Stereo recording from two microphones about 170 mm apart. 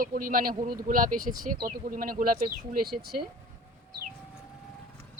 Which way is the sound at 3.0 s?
65° right (ahead or behind).